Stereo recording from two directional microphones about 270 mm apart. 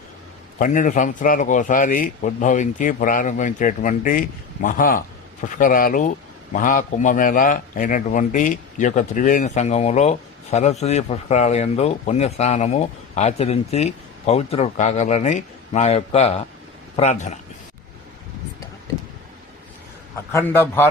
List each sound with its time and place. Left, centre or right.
0.6 s a man's voice: left
20.3 s a man's voice: centre